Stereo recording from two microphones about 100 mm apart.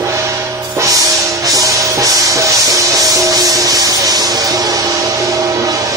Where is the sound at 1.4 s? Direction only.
35° right (ahead or behind).